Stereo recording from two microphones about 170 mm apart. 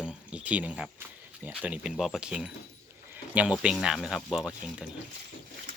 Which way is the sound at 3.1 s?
10° right (ahead or behind).